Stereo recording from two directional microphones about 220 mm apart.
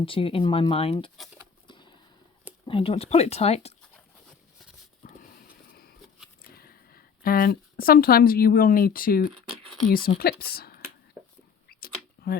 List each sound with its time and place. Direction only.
0.0 s speech: 25° left (ahead or behind)
1.1 s speech: centre (ahead or behind)
1.6 s a sound: 20° left (ahead or behind)
2.6 s speech: 25° left (ahead or behind)
6.5 s speech: 45° left (ahead or behind)
11.2 s whispering: 10° right (ahead or behind)
11.7 s a sound: 45° left (ahead or behind)